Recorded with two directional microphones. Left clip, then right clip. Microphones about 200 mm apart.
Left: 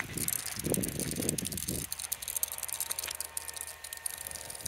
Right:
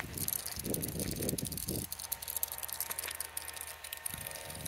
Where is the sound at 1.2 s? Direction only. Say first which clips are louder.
Left 3 dB; 35° left (ahead or behind).